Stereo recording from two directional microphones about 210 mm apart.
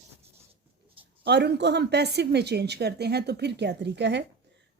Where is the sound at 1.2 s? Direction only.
50° right (ahead or behind).